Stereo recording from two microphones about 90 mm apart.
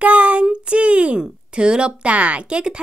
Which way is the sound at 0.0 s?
15° right (ahead or behind).